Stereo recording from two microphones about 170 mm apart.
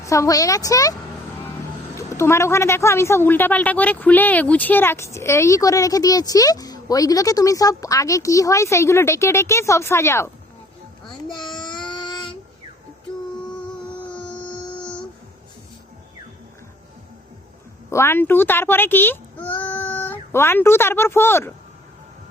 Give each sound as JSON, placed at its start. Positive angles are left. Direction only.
{"t": 0.0, "sound": "a woman's voice", "side_deg": 20}
{"t": 2.0, "sound": "a woman's voice", "side_deg": 15}
{"t": 11.3, "sound": "child singing", "side_deg": 25}
{"t": 14.1, "sound": "music", "side_deg": 5}
{"t": 14.8, "sound": "a sound", "side_deg": 5}
{"t": 17.9, "sound": "speech", "side_deg": 15}